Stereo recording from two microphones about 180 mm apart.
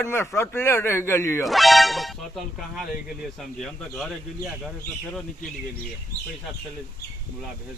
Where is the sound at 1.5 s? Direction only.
Centre (ahead or behind).